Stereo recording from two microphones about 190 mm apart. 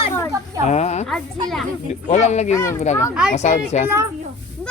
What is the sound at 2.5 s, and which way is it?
Speech, 15° left (ahead or behind).